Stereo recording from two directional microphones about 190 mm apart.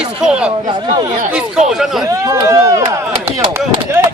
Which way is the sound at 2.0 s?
15° right (ahead or behind).